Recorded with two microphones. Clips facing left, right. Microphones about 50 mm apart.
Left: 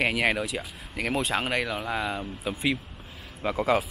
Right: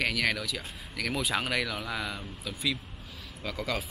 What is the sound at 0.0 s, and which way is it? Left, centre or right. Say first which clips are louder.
Speech: left 4 dB; left.